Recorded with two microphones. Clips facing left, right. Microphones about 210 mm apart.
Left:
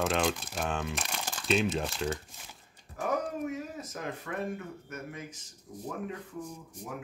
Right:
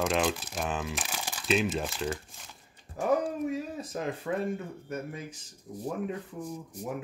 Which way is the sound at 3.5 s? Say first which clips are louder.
Right 4 dB; 30° right (ahead or behind).